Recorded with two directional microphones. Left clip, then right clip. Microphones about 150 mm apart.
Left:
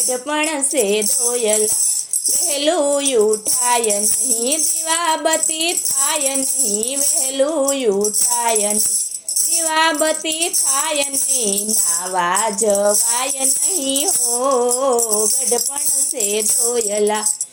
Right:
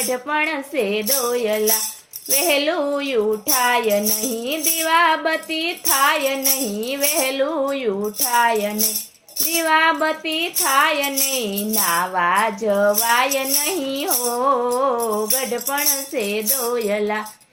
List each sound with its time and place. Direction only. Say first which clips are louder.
0.1 s music: even; 30° left (ahead or behind)
8.4 s music: right 3 dB; 40° left (ahead or behind)
12.1 s music: left 4 dB; 30° left (ahead or behind)
16.1 s music: left 4 dB; 35° left (ahead or behind)